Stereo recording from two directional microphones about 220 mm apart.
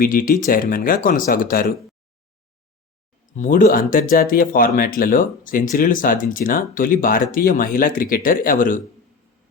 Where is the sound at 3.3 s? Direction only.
35° left (ahead or behind).